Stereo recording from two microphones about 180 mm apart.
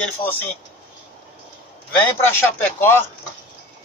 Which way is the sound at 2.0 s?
10° left (ahead or behind).